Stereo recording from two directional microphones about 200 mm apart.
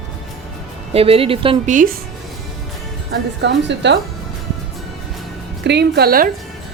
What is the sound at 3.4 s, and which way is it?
Speech, 60° right (ahead or behind).